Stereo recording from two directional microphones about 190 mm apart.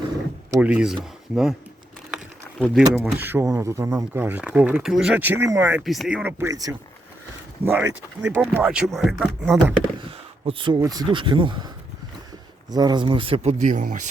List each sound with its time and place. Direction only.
0.5 s speech: 5° right (ahead or behind)
2.0 s a sound: centre (ahead or behind)
2.9 s speech: 10° right (ahead or behind)
5.8 s speech: centre (ahead or behind)
10.4 s speech: 25° right (ahead or behind)
12.7 s speech: 20° right (ahead or behind); by 14.1 s 40° right (ahead or behind)